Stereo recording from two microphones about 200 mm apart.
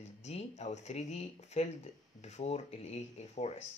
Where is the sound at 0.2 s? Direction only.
35° left (ahead or behind).